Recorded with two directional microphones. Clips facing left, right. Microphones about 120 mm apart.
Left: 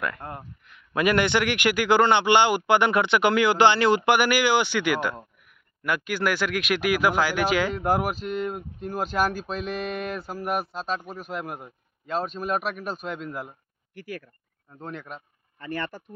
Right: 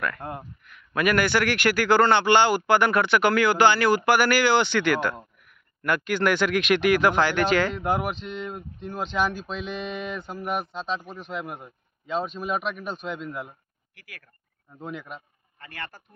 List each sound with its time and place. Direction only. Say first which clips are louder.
0.2 s speech: right 2 dB; 20° right (ahead or behind)
0.7 s a man's voice: left 1 dB; 25° left (ahead or behind); by 13.6 s centre (ahead or behind)
14.7 s a man's voice: right 1 dB; 5° right (ahead or behind)